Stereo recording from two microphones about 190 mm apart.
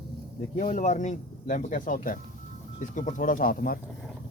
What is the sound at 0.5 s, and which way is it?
Speech, 40° left (ahead or behind).